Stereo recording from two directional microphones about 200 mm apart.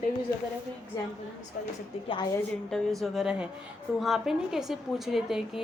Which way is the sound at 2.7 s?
Centre (ahead or behind).